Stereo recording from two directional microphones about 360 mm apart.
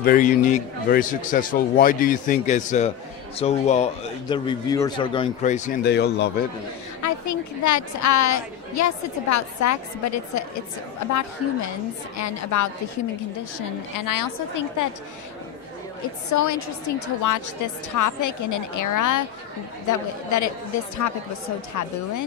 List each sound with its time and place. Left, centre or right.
0.0 s a man's voice: left
7.0 s a woman's voice: left
12.2 s a woman's voice: left
16.3 s a woman's voice: left